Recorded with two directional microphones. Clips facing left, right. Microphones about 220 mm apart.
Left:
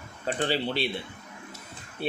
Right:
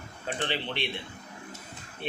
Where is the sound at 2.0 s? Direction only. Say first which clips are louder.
Left 5 dB; 40° left (ahead or behind).